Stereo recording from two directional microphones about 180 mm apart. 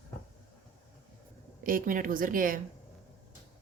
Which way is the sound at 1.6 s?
50° right (ahead or behind).